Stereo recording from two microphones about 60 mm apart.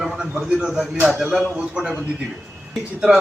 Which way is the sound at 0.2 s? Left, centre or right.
Centre.